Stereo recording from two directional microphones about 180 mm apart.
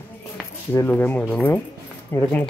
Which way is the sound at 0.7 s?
10° left (ahead or behind).